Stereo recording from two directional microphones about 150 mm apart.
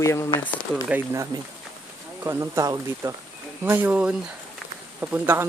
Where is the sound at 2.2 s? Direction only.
20° right (ahead or behind).